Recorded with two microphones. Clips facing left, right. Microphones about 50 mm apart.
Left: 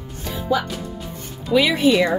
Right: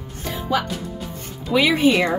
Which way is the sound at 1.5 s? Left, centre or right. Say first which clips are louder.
Even; centre.